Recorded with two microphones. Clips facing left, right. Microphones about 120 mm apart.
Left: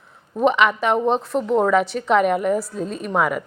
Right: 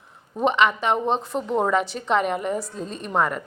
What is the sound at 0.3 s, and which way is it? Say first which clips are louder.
A woman's voice: left 3 dB; 5° left (ahead or behind).